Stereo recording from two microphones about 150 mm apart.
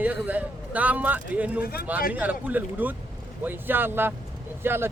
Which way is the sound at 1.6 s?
90° left.